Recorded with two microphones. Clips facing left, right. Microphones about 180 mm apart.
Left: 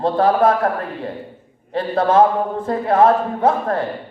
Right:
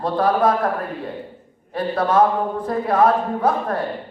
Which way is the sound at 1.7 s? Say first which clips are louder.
Left 3 dB; 25° left (ahead or behind).